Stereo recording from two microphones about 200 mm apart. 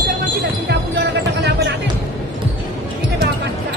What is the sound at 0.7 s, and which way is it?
Basketball bounce, 60° right (ahead or behind).